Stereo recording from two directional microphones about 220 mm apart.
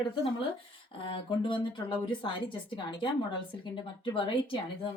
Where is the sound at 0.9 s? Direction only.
25° left (ahead or behind).